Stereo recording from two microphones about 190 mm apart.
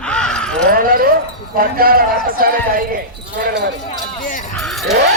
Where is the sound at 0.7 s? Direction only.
50° right (ahead or behind).